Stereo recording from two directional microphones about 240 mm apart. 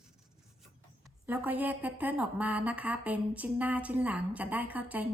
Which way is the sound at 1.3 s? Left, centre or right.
Centre.